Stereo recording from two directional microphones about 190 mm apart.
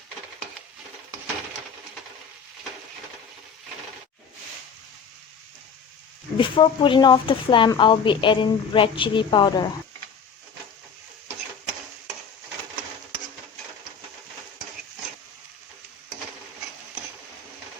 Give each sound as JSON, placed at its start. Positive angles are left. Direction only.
{"t": 6.3, "sound": "speech", "side_deg": 25}